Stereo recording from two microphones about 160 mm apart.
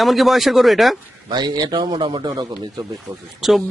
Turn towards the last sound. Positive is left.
turn(degrees=0)  # may be behind; listen again after turning